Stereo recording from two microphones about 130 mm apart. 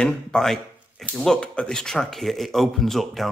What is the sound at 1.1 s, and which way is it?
Speech, 5° left (ahead or behind).